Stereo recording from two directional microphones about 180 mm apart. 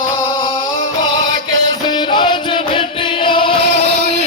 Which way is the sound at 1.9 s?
25° left (ahead or behind).